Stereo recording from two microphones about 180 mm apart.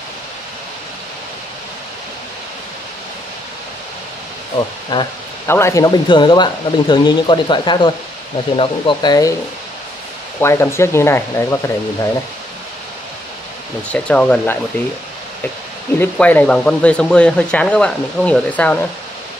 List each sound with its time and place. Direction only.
5.5 s speech: 15° left (ahead or behind)
10.4 s speech: 15° left (ahead or behind)
13.9 s speech: 5° left (ahead or behind)
16.0 s speech: 10° left (ahead or behind)